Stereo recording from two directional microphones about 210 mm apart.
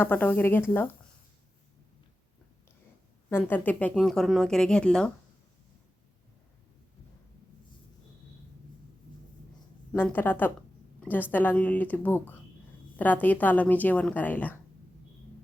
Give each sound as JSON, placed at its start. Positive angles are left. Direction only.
{"t": 0.0, "sound": "a woman's voice", "side_deg": 10}
{"t": 3.2, "sound": "speech", "side_deg": 10}
{"t": 9.9, "sound": "a woman's voice", "side_deg": 10}